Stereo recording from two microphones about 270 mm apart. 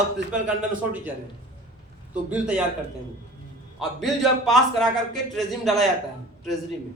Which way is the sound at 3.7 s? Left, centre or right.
Centre.